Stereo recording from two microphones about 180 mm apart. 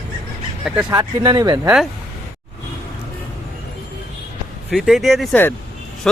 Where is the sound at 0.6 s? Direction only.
5° right (ahead or behind).